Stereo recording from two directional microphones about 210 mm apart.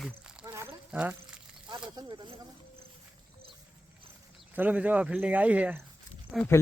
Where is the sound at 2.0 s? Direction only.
20° right (ahead or behind).